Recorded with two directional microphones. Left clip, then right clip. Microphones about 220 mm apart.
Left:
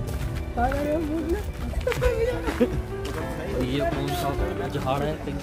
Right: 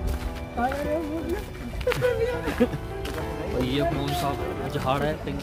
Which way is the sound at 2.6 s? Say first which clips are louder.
Left 1 dB; centre (ahead or behind).